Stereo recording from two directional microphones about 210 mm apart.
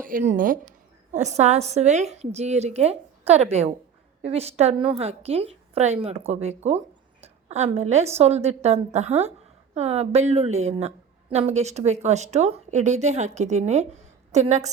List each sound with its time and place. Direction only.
0.0 s a woman's voice: 40° right (ahead or behind)